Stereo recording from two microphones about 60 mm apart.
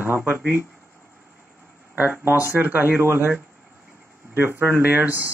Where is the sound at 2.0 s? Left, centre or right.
Right.